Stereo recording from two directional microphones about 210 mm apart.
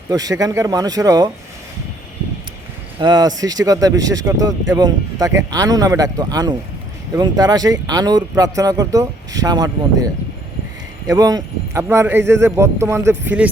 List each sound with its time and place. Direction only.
0.1 s speech: 15° right (ahead or behind)
3.0 s speech: 20° right (ahead or behind)